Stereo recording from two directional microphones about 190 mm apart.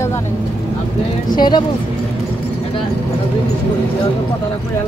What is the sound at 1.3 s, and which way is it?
Speech, 25° left (ahead or behind).